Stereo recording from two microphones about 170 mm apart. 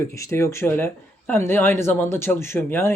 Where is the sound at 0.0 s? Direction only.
15° left (ahead or behind).